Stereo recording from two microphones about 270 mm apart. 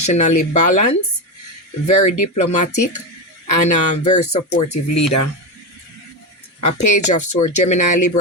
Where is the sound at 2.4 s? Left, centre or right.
Left.